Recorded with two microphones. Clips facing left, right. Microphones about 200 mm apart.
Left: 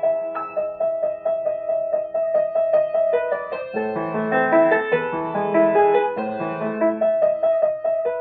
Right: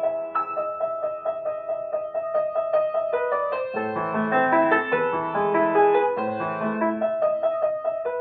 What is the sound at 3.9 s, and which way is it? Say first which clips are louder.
Music: left 3 dB; 10° left (ahead or behind).